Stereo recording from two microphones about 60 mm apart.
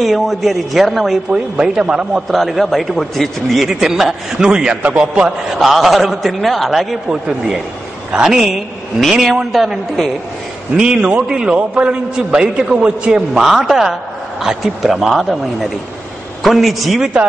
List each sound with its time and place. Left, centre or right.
0.0 s a man's voice: centre
1.3 s a man's voice: centre
2.2 s a man's voice: centre
5.6 s a man's voice: centre
10.8 s a man's voice: centre
13.5 s a man's voice: centre